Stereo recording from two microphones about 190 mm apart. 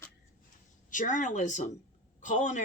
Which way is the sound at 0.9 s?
40° left (ahead or behind).